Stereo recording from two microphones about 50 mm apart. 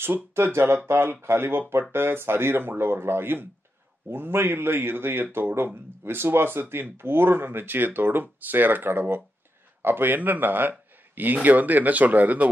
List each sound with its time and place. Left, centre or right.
0.0 s speech: right